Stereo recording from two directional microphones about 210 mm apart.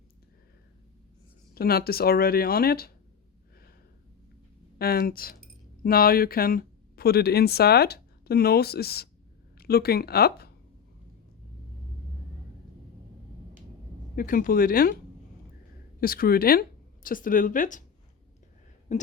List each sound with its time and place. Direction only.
1.5 s speech: 45° left (ahead or behind)
4.8 s speech: 45° left (ahead or behind)
14.2 s speech: 40° left (ahead or behind)
16.0 s speech: 45° left (ahead or behind)
18.9 s speech: 35° left (ahead or behind)